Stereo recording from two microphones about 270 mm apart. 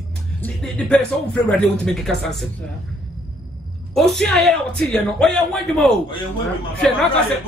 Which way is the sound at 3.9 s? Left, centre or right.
Centre.